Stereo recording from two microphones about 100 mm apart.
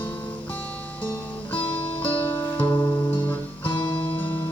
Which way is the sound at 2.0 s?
15° left (ahead or behind).